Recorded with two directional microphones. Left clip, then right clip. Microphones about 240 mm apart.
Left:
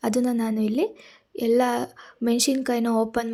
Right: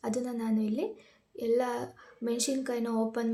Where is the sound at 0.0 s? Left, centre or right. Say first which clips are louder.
Left 9 dB; left.